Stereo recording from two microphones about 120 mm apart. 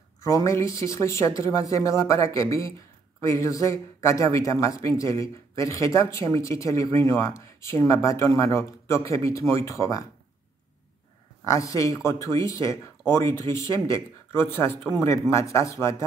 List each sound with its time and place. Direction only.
0.2 s speech: 25° left (ahead or behind)
11.4 s speech: 25° left (ahead or behind)